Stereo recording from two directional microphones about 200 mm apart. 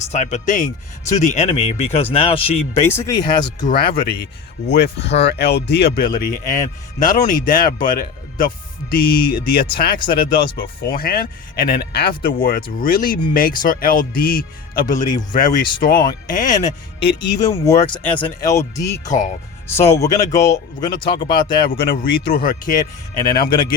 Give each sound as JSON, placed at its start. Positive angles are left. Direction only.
{"t": 0.1, "sound": "speech", "side_deg": 35}
{"t": 2.8, "sound": "speech", "side_deg": 10}
{"t": 3.7, "sound": "speech", "side_deg": 45}
{"t": 17.2, "sound": "speech", "side_deg": 20}
{"t": 19.0, "sound": "speech", "side_deg": 40}
{"t": 19.6, "sound": "speech", "side_deg": 10}
{"t": 21.6, "sound": "speech", "side_deg": 45}